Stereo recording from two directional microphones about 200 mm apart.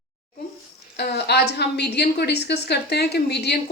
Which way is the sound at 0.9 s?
55° left (ahead or behind).